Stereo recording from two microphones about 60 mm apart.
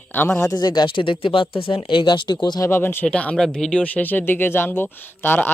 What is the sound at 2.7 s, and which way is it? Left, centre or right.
Speech, left.